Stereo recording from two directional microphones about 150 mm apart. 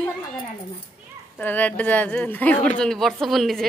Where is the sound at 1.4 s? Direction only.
10° left (ahead or behind).